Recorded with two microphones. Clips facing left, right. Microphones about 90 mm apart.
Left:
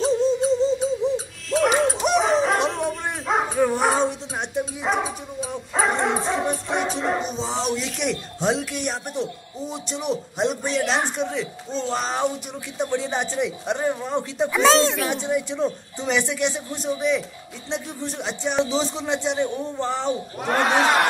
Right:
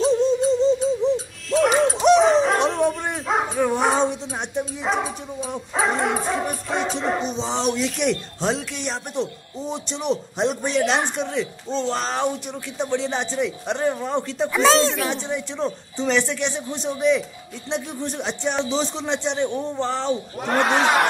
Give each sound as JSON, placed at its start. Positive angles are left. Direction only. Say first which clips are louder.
{"t": 0.0, "sound": "music", "louder": "right 2 dB", "side_deg": 0}
{"t": 1.5, "sound": "a sound", "louder": "right 1 dB", "side_deg": 0}
{"t": 6.7, "sound": "speech", "louder": "right 3 dB", "side_deg": 5}